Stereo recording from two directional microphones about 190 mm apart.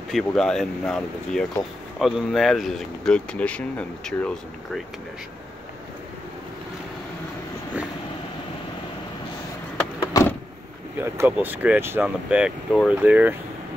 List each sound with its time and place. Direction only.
0.1 s speech: 5° left (ahead or behind)
10.1 s vehicle: 20° left (ahead or behind)
11.0 s speech: 10° right (ahead or behind)